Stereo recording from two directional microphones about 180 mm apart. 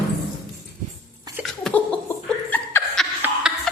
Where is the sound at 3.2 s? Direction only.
5° right (ahead or behind).